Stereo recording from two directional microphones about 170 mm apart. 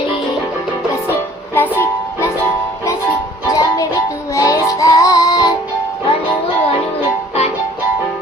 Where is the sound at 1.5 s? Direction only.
15° left (ahead or behind).